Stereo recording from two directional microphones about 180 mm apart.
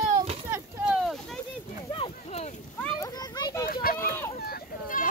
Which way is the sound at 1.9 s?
35° left (ahead or behind).